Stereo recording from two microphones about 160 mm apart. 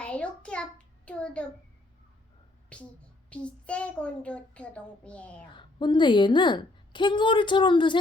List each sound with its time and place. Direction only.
0.0 s a sound: 5° left (ahead or behind)
1.0 s a child's voice: 5° left (ahead or behind)
3.2 s a child's voice: 5° left (ahead or behind)
5.5 s a woman's voice: 30° left (ahead or behind)